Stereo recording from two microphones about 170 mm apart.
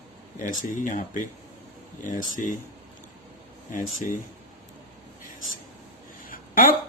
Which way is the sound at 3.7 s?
50° left (ahead or behind).